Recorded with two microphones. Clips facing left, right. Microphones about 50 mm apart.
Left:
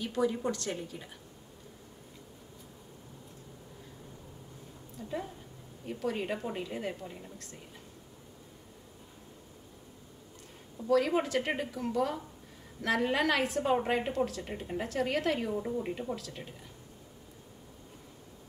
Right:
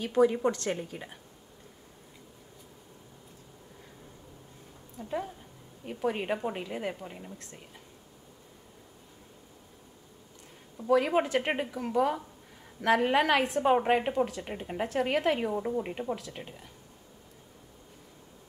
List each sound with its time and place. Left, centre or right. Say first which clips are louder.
0.0 s a woman's voice: right 6 dB; right
5.9 s a woman's voice: right 3 dB; right
10.8 s a woman's voice: right 2 dB; centre